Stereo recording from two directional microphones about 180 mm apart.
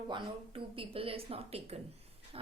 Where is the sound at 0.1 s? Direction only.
30° right (ahead or behind).